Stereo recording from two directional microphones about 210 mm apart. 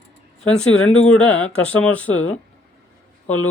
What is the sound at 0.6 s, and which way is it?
Speech, 90° left.